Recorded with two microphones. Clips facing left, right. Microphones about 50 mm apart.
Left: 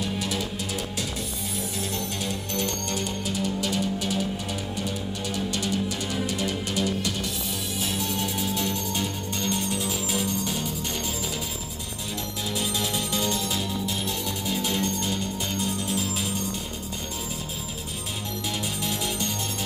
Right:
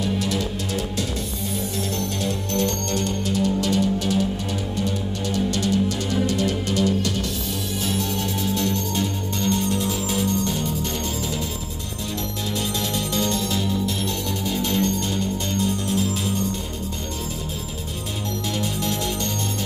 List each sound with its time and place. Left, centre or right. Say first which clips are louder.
0.0 s music: right 5 dB; centre
12.5 s music: right 2 dB; centre
18.6 s music: right 5 dB; centre